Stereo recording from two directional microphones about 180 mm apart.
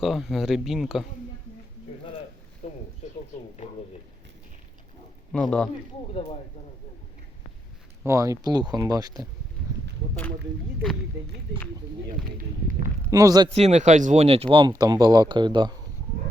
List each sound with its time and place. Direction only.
0.0 s speech: centre (ahead or behind)
2.6 s a sound: 40° left (ahead or behind)
5.3 s speech: 5° left (ahead or behind)
8.0 s speech: 15° right (ahead or behind)
13.1 s speech: 20° right (ahead or behind)
13.5 s speech: 35° right (ahead or behind)